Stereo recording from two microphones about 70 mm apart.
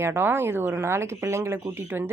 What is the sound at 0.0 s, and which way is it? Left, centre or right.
A woman's voice, right.